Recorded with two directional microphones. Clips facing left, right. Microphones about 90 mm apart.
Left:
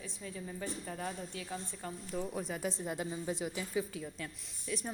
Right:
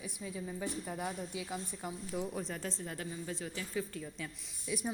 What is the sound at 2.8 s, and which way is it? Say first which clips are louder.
A woman's voice: left 4 dB; 20° left (ahead or behind).